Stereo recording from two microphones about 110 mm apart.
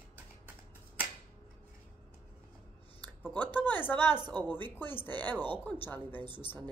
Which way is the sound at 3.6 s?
15° left (ahead or behind).